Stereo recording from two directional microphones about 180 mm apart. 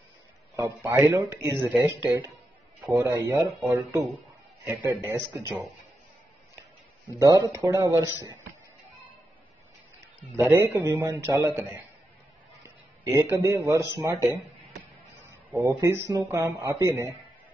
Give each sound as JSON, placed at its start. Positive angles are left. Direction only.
{"t": 0.8, "sound": "speech", "side_deg": -10}
{"t": 7.1, "sound": "speech", "side_deg": -20}
{"t": 10.2, "sound": "speech", "side_deg": -10}
{"t": 12.6, "sound": "a man's voice", "side_deg": -15}
{"t": 15.5, "sound": "speech", "side_deg": -15}